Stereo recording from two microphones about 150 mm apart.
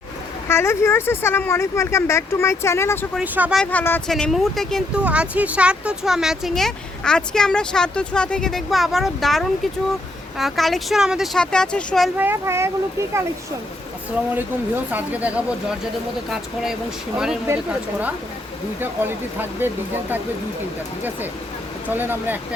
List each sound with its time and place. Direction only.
0.4 s speech: 15° left (ahead or behind)
3.2 s speech: 5° right (ahead or behind)
3.6 s speech: 10° left (ahead or behind)
12.1 s speech: 15° right (ahead or behind)
14.9 s speech: 10° right (ahead or behind)
17.4 s speech: 10° right (ahead or behind)
19.4 s speech: 15° right (ahead or behind)
21.8 s speech: 15° right (ahead or behind)